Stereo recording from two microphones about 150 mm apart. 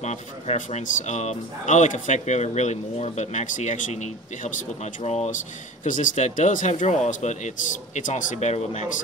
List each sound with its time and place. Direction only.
0.0 s speech: 50° left (ahead or behind)